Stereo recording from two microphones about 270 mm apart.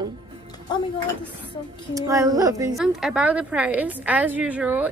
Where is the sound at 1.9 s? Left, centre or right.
Centre.